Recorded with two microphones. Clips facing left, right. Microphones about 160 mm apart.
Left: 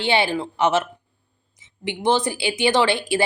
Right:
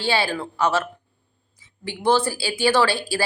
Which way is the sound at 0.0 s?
20° left (ahead or behind).